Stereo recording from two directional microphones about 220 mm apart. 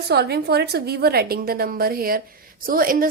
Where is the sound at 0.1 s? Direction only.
45° right (ahead or behind).